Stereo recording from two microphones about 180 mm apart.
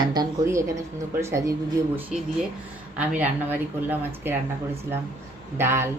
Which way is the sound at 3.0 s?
10° right (ahead or behind).